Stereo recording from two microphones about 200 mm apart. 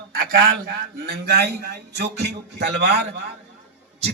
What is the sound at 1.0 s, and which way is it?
Speech, 55° right (ahead or behind).